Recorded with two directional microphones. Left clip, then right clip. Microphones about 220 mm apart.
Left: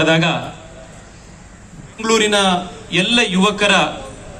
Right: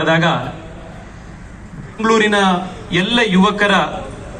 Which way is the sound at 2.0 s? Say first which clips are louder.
Right 1 dB; 25° left (ahead or behind).